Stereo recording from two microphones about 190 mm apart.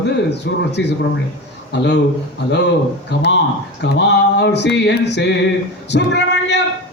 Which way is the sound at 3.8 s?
65° left (ahead or behind).